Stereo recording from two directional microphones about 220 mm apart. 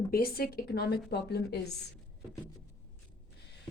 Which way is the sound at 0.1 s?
40° left (ahead or behind).